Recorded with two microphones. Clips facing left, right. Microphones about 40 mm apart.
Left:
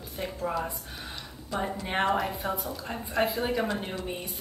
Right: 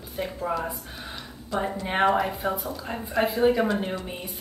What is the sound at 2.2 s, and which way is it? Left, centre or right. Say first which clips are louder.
A woman's voice: right 4 dB; centre.